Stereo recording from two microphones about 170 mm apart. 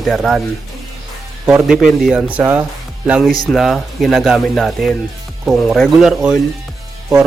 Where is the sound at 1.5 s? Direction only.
5° right (ahead or behind).